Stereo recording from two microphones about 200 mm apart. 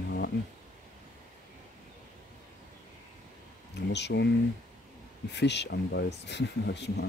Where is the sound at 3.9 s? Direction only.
60° left (ahead or behind).